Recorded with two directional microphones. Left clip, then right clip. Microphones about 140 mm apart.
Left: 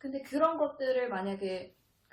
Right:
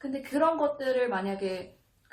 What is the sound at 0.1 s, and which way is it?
A woman's voice, 10° left (ahead or behind).